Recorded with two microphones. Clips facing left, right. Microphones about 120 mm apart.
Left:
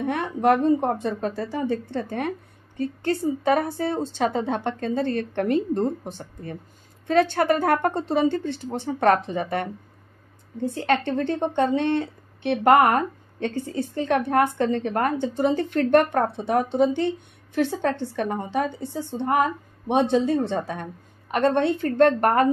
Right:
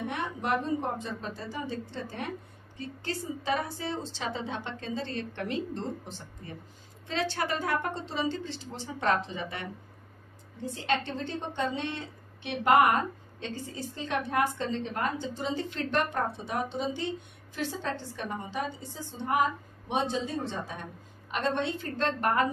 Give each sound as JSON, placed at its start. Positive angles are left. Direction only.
{"t": 0.0, "sound": "a woman's voice", "side_deg": 55}